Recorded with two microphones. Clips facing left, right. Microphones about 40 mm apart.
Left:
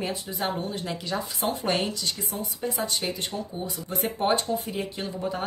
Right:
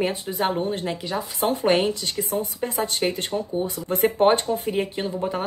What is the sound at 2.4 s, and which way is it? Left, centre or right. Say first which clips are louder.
Speech: right 4 dB; right.